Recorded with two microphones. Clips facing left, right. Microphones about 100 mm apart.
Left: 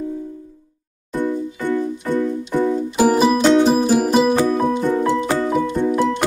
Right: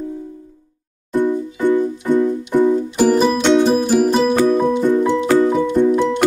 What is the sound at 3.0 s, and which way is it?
Music, 10° left (ahead or behind).